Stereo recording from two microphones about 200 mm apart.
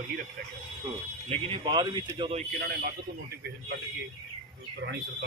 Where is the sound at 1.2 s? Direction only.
30° right (ahead or behind).